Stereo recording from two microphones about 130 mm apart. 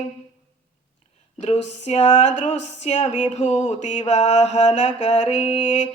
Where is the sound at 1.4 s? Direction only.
60° left (ahead or behind).